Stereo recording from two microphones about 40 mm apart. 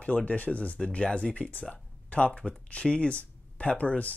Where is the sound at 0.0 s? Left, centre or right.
Left.